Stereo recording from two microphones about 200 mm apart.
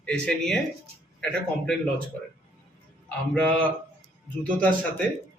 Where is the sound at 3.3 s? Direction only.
5° left (ahead or behind).